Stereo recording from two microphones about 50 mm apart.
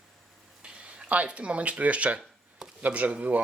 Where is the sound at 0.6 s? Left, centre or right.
Right.